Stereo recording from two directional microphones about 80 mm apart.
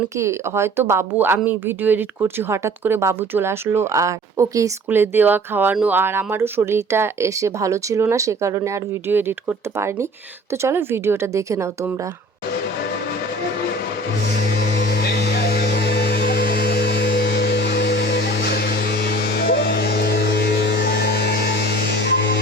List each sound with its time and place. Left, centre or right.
0.2 s speech: right
4.9 s speech: right
9.1 s speech: right